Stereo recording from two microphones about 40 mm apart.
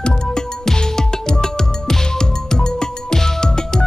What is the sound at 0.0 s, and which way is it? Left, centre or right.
Music, centre.